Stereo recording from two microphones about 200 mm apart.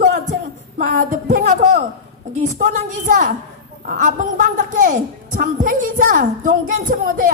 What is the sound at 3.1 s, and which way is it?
A woman's voice, 40° right (ahead or behind).